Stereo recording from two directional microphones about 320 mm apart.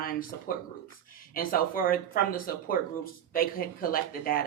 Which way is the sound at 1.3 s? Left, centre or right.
Left.